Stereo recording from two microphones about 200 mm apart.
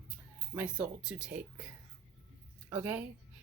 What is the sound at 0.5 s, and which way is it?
Speech, 5° right (ahead or behind).